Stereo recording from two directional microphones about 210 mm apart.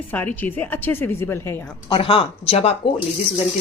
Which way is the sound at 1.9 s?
25° left (ahead or behind).